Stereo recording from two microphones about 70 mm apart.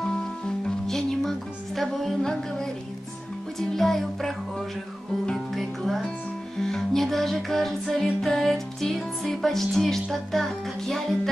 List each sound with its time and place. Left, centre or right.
0.7 s music: centre